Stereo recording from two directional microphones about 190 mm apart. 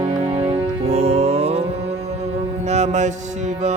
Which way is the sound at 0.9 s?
35° right (ahead or behind).